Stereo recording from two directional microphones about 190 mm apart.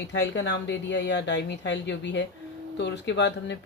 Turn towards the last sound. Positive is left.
turn(degrees=65)  # may be behind; listen again after turning